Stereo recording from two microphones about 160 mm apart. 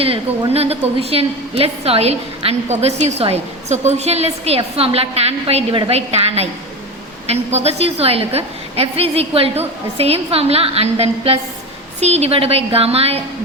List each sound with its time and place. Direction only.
0.0 s a woman's voice: 40° right (ahead or behind)